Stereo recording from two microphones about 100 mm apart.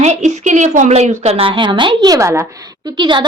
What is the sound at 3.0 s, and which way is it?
Speech, 50° right (ahead or behind).